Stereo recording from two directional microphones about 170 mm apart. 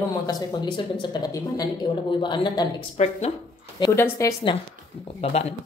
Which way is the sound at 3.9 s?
15° left (ahead or behind).